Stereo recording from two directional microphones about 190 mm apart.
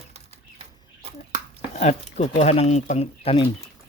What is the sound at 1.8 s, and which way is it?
Speech, 35° left (ahead or behind).